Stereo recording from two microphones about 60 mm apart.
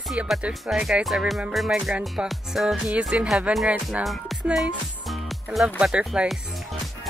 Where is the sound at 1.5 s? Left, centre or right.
Centre.